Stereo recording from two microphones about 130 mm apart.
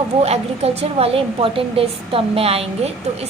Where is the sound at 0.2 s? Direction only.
55° right (ahead or behind).